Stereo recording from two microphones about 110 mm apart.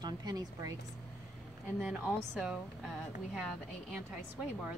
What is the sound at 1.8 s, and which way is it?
Speech, 15° right (ahead or behind).